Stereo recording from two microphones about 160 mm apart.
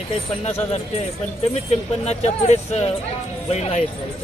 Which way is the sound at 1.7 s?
45° left (ahead or behind).